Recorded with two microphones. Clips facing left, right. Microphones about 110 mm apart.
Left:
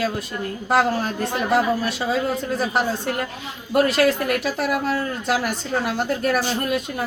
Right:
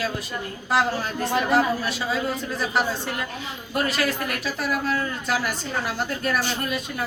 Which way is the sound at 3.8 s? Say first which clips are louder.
Left 7 dB; 55° left (ahead or behind).